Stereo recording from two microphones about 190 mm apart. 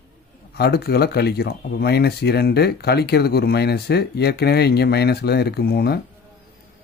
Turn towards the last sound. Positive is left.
turn(degrees=55)  # may be behind; listen again after turning